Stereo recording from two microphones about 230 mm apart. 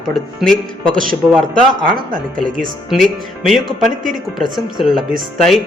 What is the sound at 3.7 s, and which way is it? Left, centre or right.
Speech, right.